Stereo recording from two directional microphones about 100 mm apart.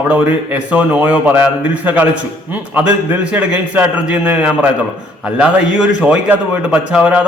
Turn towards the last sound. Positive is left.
turn(degrees=-10)  # may be behind; listen again after turning